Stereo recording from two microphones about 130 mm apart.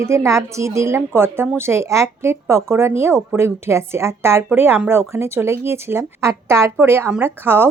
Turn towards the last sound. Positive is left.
turn(degrees=-15)  # may be behind; listen again after turning